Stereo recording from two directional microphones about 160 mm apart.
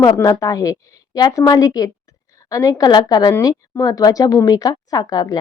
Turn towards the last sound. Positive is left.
turn(degrees=25)  # may be behind; listen again after turning